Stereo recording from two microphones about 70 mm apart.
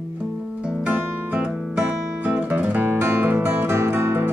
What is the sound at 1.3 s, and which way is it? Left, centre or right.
Music, centre.